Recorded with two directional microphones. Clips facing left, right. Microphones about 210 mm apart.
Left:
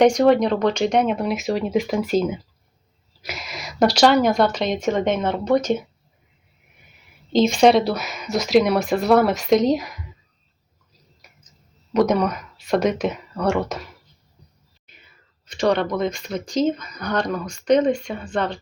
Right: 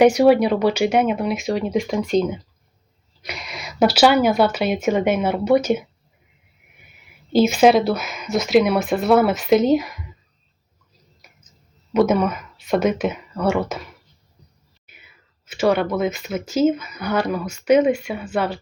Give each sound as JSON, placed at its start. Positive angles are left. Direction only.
{"t": 0.0, "sound": "speech", "side_deg": -5}
{"t": 7.3, "sound": "speech", "side_deg": -5}
{"t": 11.2, "sound": "a sound", "side_deg": 0}
{"t": 11.9, "sound": "speech", "side_deg": -5}
{"t": 15.4, "sound": "speech", "side_deg": -5}